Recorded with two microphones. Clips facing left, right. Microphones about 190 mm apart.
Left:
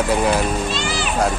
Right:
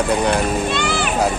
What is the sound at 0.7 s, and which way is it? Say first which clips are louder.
Vehicle: right 3 dB; 60° right (ahead or behind).